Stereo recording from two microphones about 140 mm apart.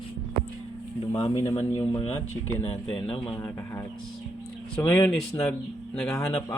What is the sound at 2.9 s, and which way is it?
Speech, 35° left (ahead or behind).